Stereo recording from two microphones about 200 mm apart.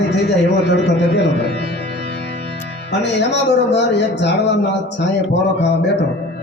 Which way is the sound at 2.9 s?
60° left (ahead or behind).